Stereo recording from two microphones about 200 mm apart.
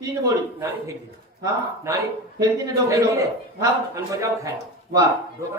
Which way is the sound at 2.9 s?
15° right (ahead or behind).